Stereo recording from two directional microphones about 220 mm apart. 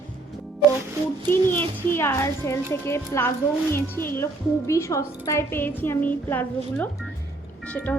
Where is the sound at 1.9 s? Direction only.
10° left (ahead or behind).